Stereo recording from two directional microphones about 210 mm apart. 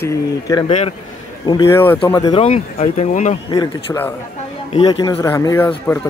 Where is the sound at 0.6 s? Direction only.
30° left (ahead or behind).